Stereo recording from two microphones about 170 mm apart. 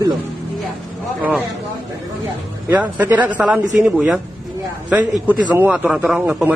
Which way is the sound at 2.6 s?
10° right (ahead or behind).